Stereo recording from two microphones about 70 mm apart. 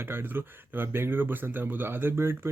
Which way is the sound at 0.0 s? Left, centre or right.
Right.